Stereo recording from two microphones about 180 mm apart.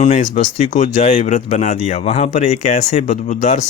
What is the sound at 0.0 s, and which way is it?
A man's voice, 40° left (ahead or behind).